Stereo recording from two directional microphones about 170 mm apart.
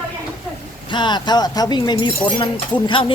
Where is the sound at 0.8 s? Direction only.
25° left (ahead or behind).